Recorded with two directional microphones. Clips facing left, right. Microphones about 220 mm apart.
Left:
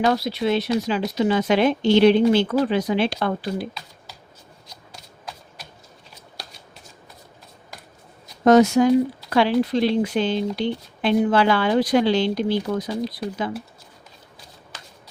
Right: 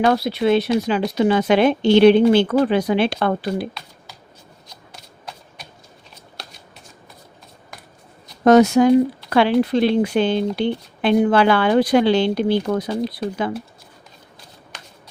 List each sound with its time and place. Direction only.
0.0 s speech: 60° right (ahead or behind)
8.4 s speech: 65° right (ahead or behind)